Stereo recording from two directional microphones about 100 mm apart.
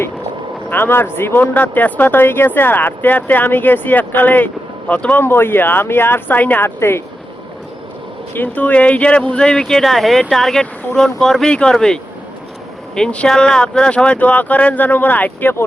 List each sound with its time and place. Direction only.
0.7 s speech: 20° left (ahead or behind)
5.2 s speech: 25° left (ahead or behind)
8.3 s speech: 20° left (ahead or behind)
13.0 s speech: 10° left (ahead or behind)